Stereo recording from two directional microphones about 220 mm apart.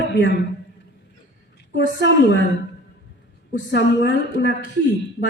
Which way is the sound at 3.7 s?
50° left (ahead or behind).